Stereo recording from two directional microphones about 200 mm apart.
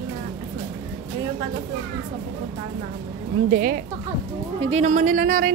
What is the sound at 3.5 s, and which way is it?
A woman's voice, 45° right (ahead or behind).